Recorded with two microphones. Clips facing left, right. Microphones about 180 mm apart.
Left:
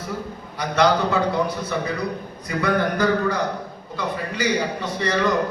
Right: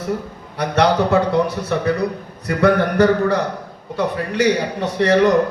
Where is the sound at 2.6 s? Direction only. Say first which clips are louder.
Right 6 dB; 70° right (ahead or behind).